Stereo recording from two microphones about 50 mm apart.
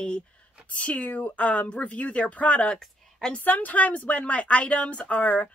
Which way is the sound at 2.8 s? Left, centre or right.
Centre.